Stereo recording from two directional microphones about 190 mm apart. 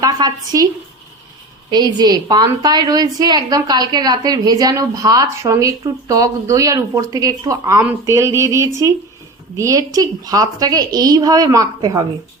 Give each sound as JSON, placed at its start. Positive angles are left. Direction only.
{"t": 0.0, "sound": "a woman's voice", "side_deg": -20}
{"t": 1.7, "sound": "a woman's voice", "side_deg": -20}